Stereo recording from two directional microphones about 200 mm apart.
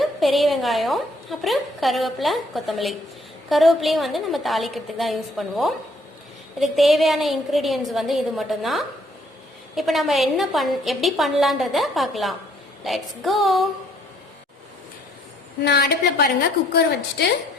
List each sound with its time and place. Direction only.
0.0 s a woman's voice: centre (ahead or behind)
15.6 s a woman's voice: 55° left (ahead or behind)